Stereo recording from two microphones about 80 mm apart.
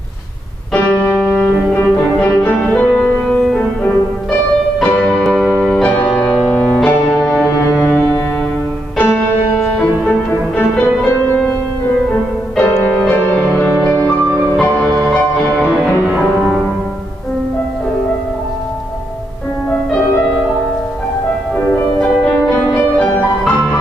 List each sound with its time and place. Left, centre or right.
0.7 s music: left
6.1 s music: centre
6.5 s music: centre
7.8 s cello: centre
9.8 s music: centre
12.1 s music: left
22.2 s music: centre